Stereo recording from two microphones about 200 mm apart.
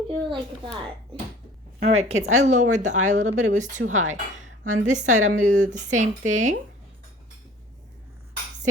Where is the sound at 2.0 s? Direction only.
35° right (ahead or behind).